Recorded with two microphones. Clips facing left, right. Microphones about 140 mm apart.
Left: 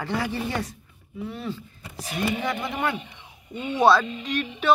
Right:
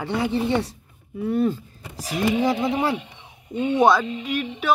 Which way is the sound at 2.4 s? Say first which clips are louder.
Right 6 dB; 30° right (ahead or behind).